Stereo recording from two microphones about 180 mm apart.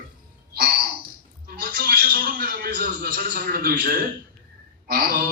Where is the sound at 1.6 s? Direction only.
55° right (ahead or behind).